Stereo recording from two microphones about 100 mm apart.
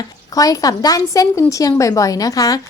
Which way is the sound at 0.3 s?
35° left (ahead or behind).